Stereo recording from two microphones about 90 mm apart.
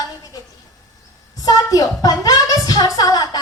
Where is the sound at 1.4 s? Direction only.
45° left (ahead or behind).